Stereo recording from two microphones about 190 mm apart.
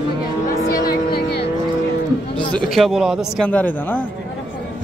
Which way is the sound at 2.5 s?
Centre (ahead or behind).